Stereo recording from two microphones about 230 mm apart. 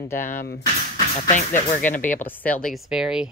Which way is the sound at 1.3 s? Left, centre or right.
Left.